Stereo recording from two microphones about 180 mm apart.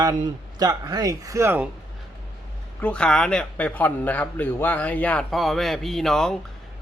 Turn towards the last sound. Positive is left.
turn(degrees=0)  # may be behind; listen again after turning